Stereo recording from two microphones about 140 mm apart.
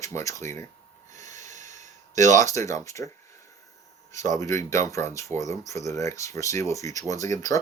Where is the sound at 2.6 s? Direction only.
20° left (ahead or behind).